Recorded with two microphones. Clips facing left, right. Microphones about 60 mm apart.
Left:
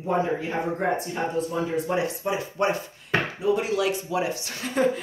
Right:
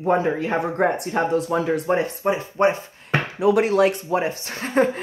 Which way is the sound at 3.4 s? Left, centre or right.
Right.